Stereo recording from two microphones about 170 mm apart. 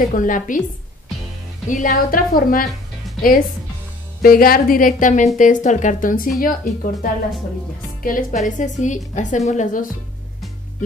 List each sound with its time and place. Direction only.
0.0 s a woman's voice: 50° left (ahead or behind)
1.7 s a woman's voice: 55° left (ahead or behind)
4.2 s a woman's voice: 60° left (ahead or behind)